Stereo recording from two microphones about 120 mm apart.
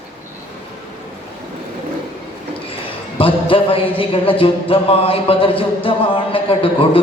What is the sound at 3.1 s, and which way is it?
A man's voice, 50° left (ahead or behind).